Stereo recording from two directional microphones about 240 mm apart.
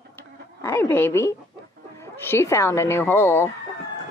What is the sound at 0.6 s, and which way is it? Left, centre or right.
A woman's voice, centre.